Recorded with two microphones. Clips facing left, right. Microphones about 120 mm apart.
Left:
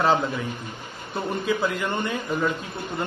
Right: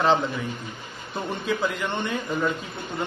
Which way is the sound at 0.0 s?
5° left (ahead or behind).